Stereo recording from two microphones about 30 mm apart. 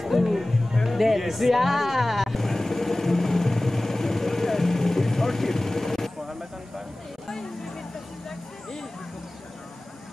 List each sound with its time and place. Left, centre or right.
0.0 s music: centre
0.8 s speech: centre
2.3 s vehicle: centre
7.2 s a sound: centre